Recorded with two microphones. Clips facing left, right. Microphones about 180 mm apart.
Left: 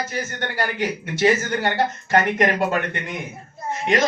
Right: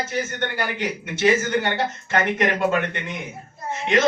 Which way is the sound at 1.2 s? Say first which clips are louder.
Even; 35° left (ahead or behind).